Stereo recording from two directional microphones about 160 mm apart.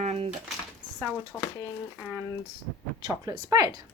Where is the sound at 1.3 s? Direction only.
5° left (ahead or behind).